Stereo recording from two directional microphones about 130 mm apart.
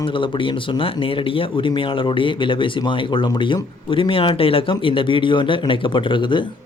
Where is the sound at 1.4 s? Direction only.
40° left (ahead or behind).